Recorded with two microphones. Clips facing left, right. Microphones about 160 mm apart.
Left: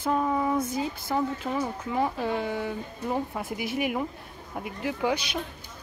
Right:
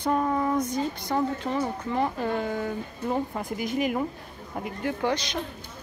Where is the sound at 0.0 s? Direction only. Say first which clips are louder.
Right 1 dB; centre (ahead or behind).